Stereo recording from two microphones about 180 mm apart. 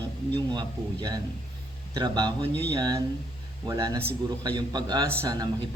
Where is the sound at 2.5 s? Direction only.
10° left (ahead or behind).